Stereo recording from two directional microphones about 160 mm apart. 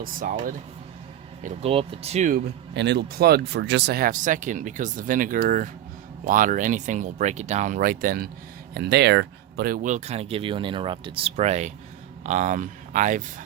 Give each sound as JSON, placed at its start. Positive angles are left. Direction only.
{"t": 0.0, "sound": "speech", "side_deg": -60}
{"t": 1.6, "sound": "speech", "side_deg": -35}
{"t": 2.3, "sound": "speech", "side_deg": -90}
{"t": 8.7, "sound": "speech", "side_deg": -90}